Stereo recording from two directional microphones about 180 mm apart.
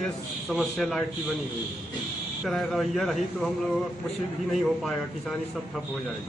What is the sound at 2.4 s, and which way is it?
A man's voice, centre (ahead or behind).